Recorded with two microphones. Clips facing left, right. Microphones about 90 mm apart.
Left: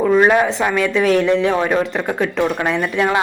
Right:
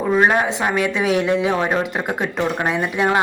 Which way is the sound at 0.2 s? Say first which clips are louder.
Left 3 dB; 15° right (ahead or behind).